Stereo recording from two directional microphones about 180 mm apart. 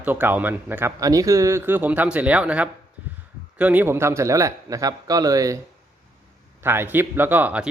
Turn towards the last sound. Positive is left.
turn(degrees=-10)  # may be behind; listen again after turning